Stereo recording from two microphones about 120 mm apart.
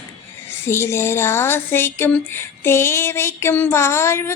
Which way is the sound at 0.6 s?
20° left (ahead or behind).